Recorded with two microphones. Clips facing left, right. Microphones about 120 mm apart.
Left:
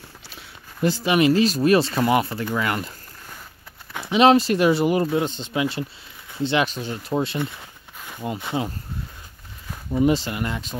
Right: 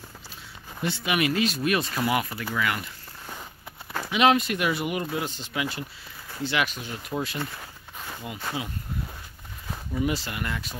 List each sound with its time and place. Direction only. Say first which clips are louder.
0.8 s speech: left 8 dB; 35° left (ahead or behind)
4.1 s speech: left 6 dB; 30° left (ahead or behind)
9.9 s speech: left 8 dB; 25° left (ahead or behind)